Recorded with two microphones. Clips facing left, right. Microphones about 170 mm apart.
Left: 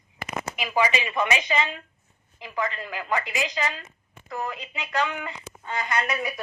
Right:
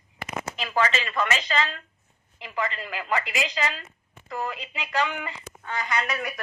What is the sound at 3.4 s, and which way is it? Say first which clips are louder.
Speech: even; 10° left (ahead or behind).